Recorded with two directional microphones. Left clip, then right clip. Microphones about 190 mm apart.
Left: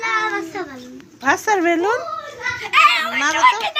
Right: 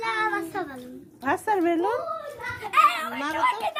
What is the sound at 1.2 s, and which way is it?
Speech, 5° right (ahead or behind).